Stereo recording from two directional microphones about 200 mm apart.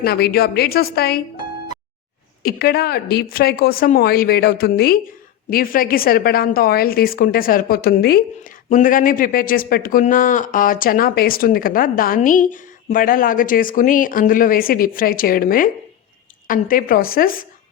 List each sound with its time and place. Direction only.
0.0 s a woman's voice: 50° left (ahead or behind)
2.4 s a woman's voice: 50° left (ahead or behind)